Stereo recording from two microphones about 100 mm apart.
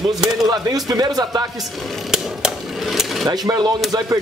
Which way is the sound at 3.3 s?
40° right (ahead or behind).